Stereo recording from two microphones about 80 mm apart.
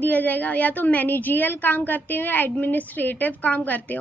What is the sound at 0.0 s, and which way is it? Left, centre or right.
A woman's voice, left.